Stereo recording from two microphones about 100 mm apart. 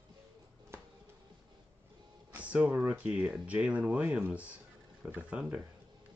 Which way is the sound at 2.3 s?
15° right (ahead or behind).